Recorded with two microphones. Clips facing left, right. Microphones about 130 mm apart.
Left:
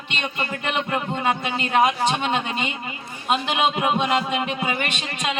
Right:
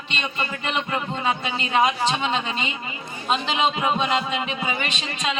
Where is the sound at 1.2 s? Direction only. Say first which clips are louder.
Left 2 dB; 50° left (ahead or behind).